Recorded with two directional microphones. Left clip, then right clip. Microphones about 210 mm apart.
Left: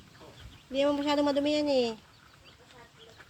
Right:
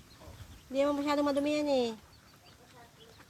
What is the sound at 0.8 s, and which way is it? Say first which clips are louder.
Speech: left 2 dB; 15° right (ahead or behind).